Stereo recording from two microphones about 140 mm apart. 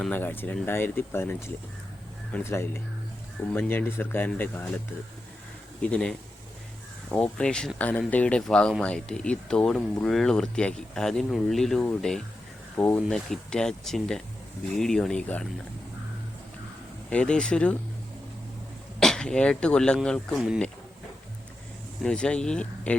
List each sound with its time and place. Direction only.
0.1 s speech: 15° left (ahead or behind)
5.8 s speech: 5° left (ahead or behind)
17.1 s speech: 5° left (ahead or behind)
18.9 s speech: 5° left (ahead or behind)
22.0 s speech: 5° left (ahead or behind)